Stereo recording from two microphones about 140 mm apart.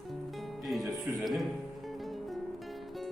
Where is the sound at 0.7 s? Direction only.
Centre (ahead or behind).